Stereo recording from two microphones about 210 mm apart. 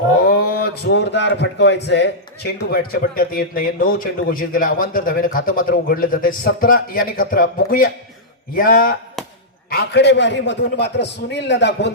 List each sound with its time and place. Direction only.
0.3 s a man's voice: 45° left (ahead or behind)